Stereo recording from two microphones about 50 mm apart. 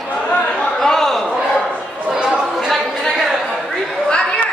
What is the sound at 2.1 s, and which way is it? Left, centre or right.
Chatter, centre.